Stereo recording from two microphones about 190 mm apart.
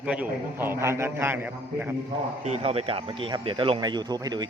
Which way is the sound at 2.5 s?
35° right (ahead or behind).